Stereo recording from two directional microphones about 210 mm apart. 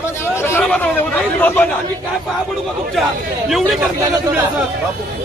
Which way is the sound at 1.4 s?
10° left (ahead or behind).